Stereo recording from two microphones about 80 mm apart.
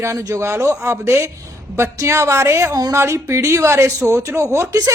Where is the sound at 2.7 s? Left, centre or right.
Right.